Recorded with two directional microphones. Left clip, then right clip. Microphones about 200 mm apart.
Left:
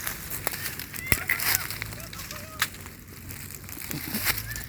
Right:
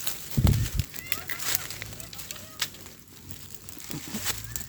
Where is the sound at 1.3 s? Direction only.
30° left (ahead or behind).